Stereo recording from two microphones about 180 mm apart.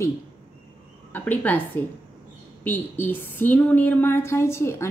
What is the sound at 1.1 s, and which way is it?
Speech, 10° left (ahead or behind).